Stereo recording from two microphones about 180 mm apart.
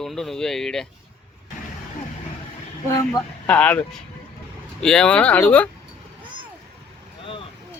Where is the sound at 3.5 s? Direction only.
10° left (ahead or behind).